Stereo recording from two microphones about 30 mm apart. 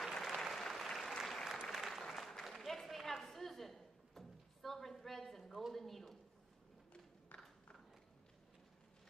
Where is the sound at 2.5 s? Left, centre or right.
Centre.